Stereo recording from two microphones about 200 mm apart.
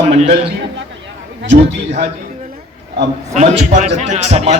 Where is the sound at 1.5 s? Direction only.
35° right (ahead or behind).